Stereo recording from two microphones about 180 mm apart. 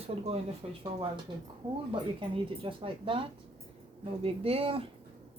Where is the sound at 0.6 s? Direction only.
30° right (ahead or behind).